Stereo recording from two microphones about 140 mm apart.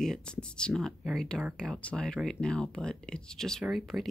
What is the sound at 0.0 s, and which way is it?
Speech, 5° left (ahead or behind).